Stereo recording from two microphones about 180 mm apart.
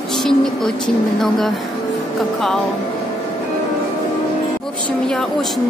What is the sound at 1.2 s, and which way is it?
Speech, centre (ahead or behind).